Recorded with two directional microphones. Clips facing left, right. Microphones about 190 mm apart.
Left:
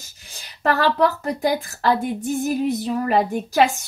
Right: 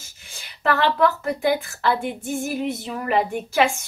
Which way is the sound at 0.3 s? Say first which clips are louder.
Left 1 dB; 40° left (ahead or behind).